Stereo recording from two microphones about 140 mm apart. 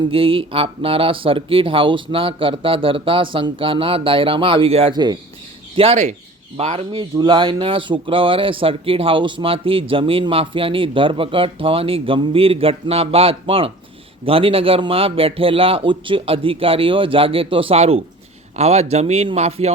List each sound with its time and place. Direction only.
0.1 s speech: 40° right (ahead or behind)
7.2 s speech: 35° right (ahead or behind)